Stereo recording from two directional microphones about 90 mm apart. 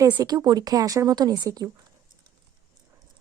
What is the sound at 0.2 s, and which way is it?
A woman's voice, 50° right (ahead or behind).